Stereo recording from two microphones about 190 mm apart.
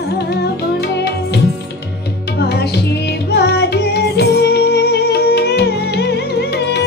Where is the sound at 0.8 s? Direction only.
60° left (ahead or behind).